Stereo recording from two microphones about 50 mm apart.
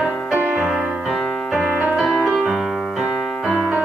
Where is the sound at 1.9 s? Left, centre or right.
Centre.